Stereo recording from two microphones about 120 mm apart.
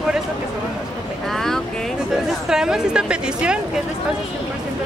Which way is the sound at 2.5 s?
5° right (ahead or behind).